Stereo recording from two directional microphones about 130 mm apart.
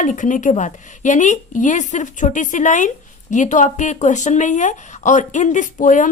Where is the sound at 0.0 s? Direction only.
80° left.